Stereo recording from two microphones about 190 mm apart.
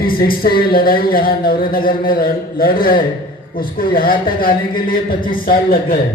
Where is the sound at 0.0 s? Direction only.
50° left (ahead or behind).